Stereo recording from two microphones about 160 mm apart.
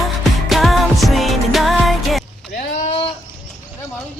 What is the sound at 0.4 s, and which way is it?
Music, centre (ahead or behind).